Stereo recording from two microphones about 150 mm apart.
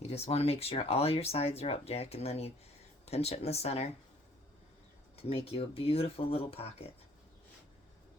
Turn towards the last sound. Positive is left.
turn(degrees=40)  # may be behind; listen again after turning